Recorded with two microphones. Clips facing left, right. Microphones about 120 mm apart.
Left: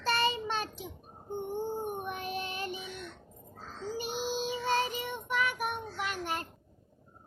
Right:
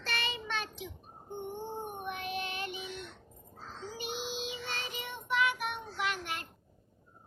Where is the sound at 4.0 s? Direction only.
40° left (ahead or behind).